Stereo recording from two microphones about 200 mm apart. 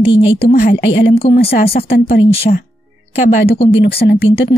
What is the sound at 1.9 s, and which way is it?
Speech, 55° left (ahead or behind).